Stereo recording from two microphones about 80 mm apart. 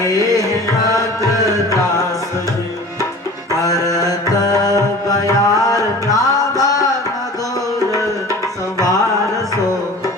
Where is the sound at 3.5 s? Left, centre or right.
Left.